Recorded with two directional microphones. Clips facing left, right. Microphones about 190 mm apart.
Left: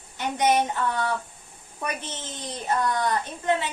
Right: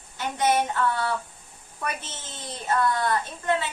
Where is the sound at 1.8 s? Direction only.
15° left (ahead or behind).